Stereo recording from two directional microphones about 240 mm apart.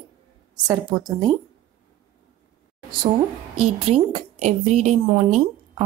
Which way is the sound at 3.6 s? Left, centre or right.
Right.